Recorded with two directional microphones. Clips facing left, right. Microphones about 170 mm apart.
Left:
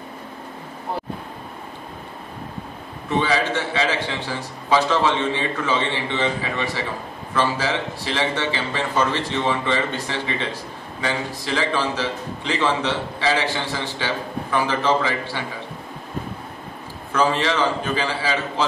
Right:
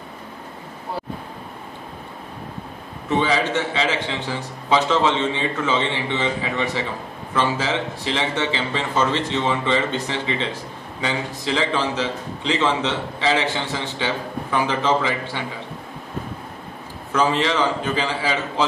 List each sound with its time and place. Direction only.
3.2 s speech: 20° right (ahead or behind)
17.1 s a man's voice: 20° right (ahead or behind)